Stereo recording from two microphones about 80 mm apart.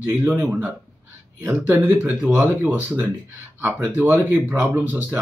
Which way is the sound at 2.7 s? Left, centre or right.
Right.